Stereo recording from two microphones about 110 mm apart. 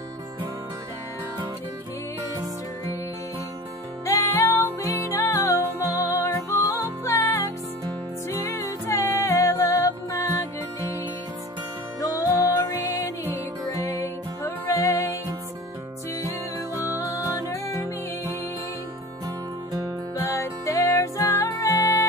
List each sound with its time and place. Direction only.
4.0 s music: 25° left (ahead or behind)
12.0 s music: 30° left (ahead or behind)
13.8 s music: 25° left (ahead or behind)
17.0 s music: 30° left (ahead or behind)
20.2 s music: 30° left (ahead or behind)